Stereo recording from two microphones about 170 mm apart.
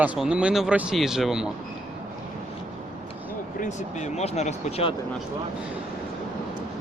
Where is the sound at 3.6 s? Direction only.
45° left (ahead or behind).